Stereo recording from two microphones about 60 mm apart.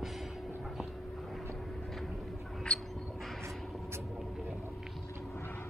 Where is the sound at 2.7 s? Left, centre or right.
Centre.